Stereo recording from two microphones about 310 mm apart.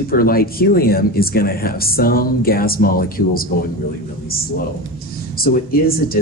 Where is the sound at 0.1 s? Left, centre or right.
Left.